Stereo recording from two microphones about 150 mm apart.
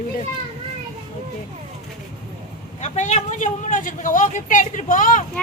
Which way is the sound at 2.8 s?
50° left (ahead or behind).